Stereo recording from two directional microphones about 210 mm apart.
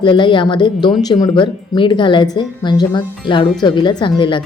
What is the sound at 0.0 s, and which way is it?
A woman's voice, 25° left (ahead or behind).